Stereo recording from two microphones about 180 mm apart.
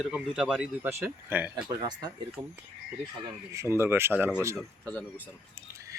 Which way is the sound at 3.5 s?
15° right (ahead or behind).